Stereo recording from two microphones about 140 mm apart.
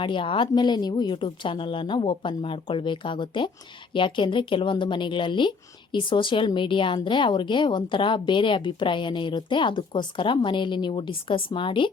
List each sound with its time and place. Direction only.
0.0 s a woman's voice: 35° left (ahead or behind)